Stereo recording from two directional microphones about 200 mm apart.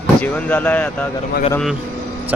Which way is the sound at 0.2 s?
5° left (ahead or behind).